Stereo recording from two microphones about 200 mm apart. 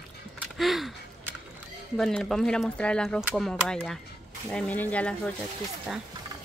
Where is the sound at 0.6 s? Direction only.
Centre (ahead or behind).